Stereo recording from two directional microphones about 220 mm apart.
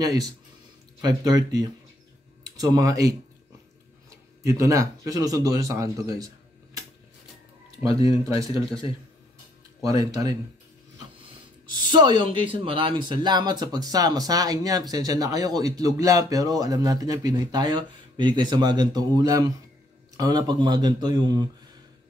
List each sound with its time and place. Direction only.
0.0 s speech: 15° right (ahead or behind)
4.4 s speech: 15° right (ahead or behind)
7.8 s speech: 25° left (ahead or behind)
9.8 s speech: 15° right (ahead or behind)
11.7 s a man's voice: 20° right (ahead or behind)